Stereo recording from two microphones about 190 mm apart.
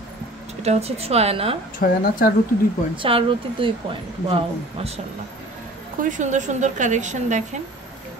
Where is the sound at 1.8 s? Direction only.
45° left (ahead or behind).